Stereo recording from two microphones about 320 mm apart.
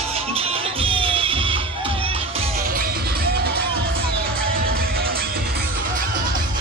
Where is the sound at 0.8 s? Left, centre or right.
Centre.